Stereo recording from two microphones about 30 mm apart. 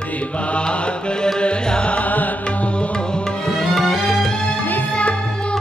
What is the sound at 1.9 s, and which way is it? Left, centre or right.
Music, left.